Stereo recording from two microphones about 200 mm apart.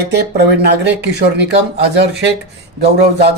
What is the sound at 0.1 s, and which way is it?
A man's voice, 55° right (ahead or behind).